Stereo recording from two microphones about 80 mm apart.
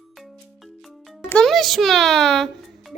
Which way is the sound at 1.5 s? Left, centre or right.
Centre.